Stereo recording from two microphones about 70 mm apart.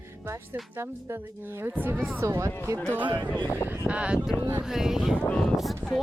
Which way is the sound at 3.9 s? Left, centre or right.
Centre.